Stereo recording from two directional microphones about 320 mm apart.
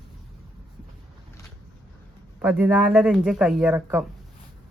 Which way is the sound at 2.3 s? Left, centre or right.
Centre.